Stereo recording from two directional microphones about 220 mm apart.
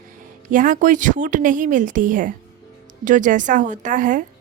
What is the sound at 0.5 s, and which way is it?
A woman's voice, 35° right (ahead or behind).